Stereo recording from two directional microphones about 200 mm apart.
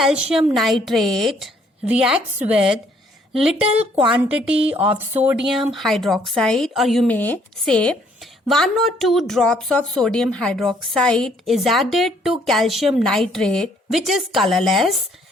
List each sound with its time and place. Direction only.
0.0 s speech: 5° right (ahead or behind)
4.1 s speech: 5° right (ahead or behind)